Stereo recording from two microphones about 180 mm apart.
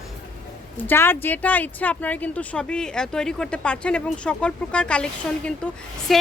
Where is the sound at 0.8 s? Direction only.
10° left (ahead or behind).